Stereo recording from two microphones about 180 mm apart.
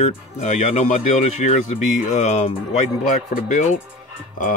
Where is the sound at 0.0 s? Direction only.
40° left (ahead or behind).